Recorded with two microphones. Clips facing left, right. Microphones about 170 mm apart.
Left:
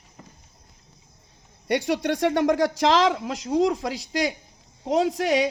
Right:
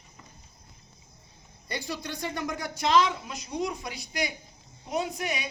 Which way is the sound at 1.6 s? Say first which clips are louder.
Left 12 dB; 75° left (ahead or behind).